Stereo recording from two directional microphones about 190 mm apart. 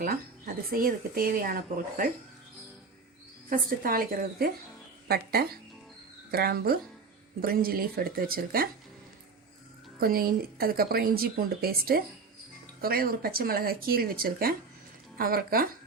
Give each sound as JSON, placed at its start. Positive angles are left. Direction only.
{"t": 0.0, "sound": "speech", "side_deg": -50}
{"t": 3.5, "sound": "speech", "side_deg": -50}
{"t": 10.0, "sound": "speech", "side_deg": -50}